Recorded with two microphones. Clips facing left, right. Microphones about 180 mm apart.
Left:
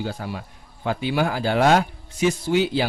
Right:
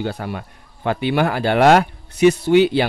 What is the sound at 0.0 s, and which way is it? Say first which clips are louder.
Speech: right 4 dB; 60° right (ahead or behind).